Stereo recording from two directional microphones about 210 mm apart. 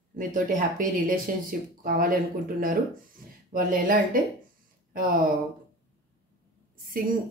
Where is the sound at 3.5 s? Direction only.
40° right (ahead or behind).